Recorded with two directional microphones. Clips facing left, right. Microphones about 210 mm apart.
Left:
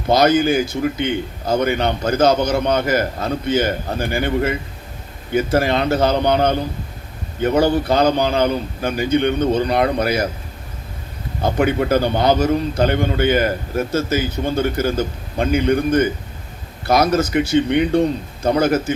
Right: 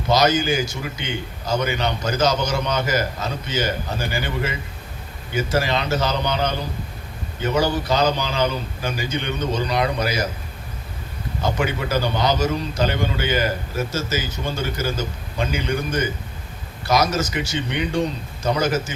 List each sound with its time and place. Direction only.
0.1 s a man's voice: 55° left (ahead or behind)
11.4 s a man's voice: 55° left (ahead or behind)